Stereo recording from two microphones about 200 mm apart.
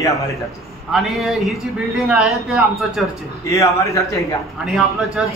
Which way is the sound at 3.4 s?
15° left (ahead or behind).